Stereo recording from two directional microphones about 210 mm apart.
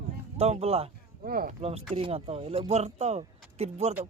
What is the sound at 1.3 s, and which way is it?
Speech, 45° right (ahead or behind).